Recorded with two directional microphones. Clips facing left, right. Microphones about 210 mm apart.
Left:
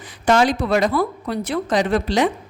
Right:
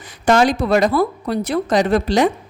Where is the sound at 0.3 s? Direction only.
45° right (ahead or behind).